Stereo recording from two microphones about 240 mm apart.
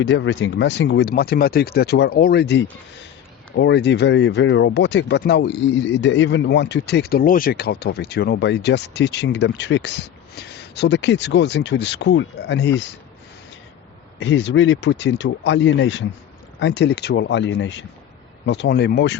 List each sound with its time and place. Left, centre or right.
0.0 s speech: left
14.2 s speech: left